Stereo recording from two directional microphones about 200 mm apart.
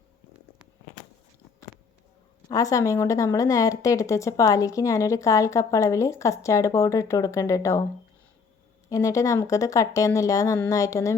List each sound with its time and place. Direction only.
2.5 s a woman's voice: 15° left (ahead or behind)
8.9 s a woman's voice: 15° left (ahead or behind)